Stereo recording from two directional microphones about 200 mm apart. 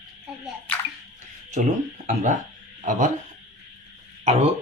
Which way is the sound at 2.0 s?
35° right (ahead or behind).